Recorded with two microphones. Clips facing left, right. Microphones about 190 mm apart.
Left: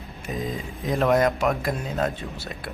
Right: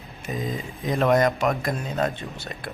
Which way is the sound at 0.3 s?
Centre (ahead or behind).